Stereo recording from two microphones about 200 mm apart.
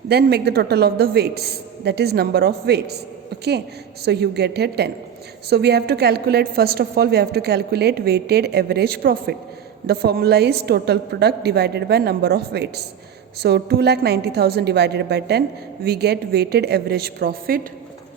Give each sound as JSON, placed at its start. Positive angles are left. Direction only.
{"t": 0.1, "sound": "a woman's voice", "side_deg": -55}
{"t": 4.0, "sound": "a woman's voice", "side_deg": -55}